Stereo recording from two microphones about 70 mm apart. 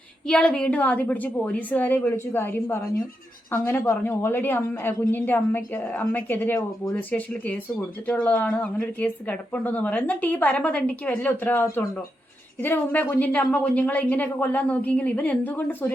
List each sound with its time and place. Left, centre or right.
0.3 s a woman's voice: centre